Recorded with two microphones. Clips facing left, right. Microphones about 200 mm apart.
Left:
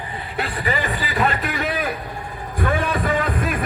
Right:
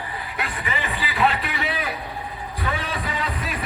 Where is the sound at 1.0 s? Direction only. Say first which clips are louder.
Left 1 dB; 50° left (ahead or behind).